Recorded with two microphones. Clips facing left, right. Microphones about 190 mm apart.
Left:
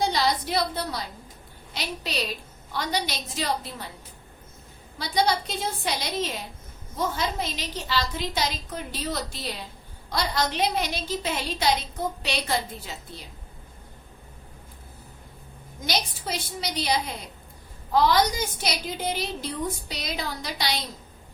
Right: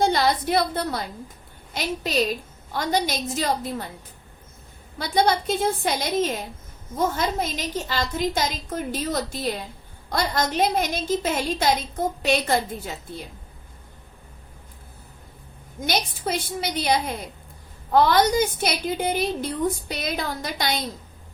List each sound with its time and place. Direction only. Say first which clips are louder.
0.0 s a woman's voice: right 4 dB; 55° right (ahead or behind)
4.9 s a woman's voice: right 3 dB; 50° right (ahead or behind)
15.9 s a woman's voice: right 4 dB; 50° right (ahead or behind)